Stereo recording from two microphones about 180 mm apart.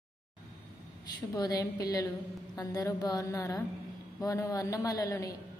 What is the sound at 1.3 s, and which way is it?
A woman's voice, 20° left (ahead or behind).